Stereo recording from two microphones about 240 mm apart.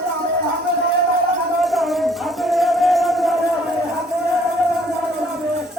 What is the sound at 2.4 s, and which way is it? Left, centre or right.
Music, centre.